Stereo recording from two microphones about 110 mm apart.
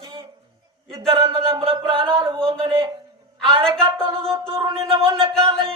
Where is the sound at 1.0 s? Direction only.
45° right (ahead or behind).